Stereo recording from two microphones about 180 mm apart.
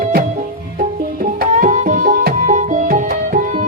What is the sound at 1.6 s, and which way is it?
Music, 45° right (ahead or behind).